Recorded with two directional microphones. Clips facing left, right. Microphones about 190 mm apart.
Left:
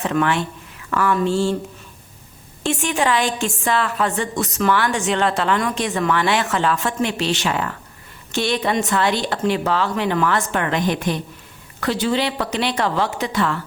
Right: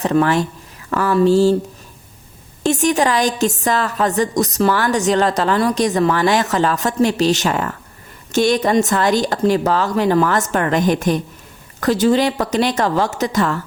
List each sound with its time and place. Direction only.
0.0 s a woman's voice: 40° right (ahead or behind)
2.6 s a woman's voice: 40° right (ahead or behind)